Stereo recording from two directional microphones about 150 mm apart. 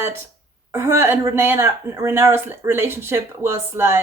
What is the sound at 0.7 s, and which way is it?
Speech, 20° right (ahead or behind).